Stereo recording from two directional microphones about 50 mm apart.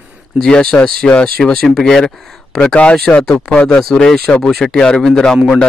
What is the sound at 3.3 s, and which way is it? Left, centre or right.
Speech, left.